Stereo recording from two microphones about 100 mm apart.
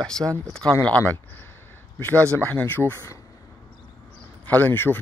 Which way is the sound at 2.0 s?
15° left (ahead or behind).